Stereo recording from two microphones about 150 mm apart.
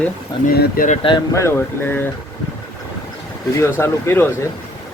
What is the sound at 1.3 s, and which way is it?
Speech, 20° left (ahead or behind).